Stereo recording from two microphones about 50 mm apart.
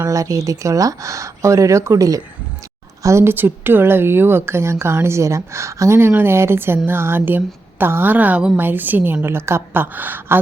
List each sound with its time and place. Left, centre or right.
0.0 s speech: right
3.0 s speech: right
3.2 s a woman's voice: right
6.0 s a woman's voice: right
9.2 s a woman's voice: right
9.8 s a woman's voice: right